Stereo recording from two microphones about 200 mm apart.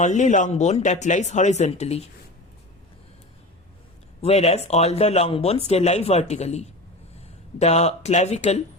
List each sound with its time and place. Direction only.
0.0 s speech: 35° left (ahead or behind)
4.2 s speech: 30° left (ahead or behind)